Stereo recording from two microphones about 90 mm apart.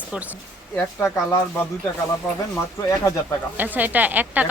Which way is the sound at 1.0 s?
30° left (ahead or behind).